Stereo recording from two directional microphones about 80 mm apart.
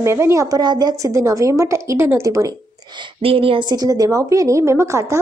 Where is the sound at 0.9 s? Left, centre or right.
Right.